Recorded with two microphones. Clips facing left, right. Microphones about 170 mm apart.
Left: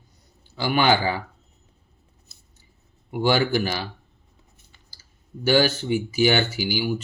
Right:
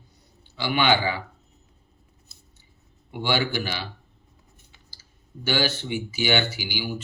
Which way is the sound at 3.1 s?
45° left (ahead or behind).